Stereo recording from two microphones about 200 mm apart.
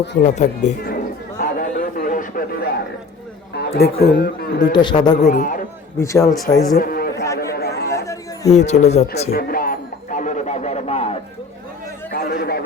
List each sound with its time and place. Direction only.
0.2 s speech: 35° left (ahead or behind)
1.4 s chatter: 40° left (ahead or behind)
3.8 s speech: 50° left (ahead or behind)
4.7 s a man's voice: 20° left (ahead or behind)
5.1 s speech: 40° left (ahead or behind)
6.0 s a man's voice: 15° left (ahead or behind)
6.7 s a sound: 50° left (ahead or behind)
7.9 s a sound: 15° left (ahead or behind)
8.5 s speech: 35° left (ahead or behind)
9.3 s music: 45° left (ahead or behind); by 11.2 s 30° left (ahead or behind)
12.1 s a man's voice: 50° left (ahead or behind)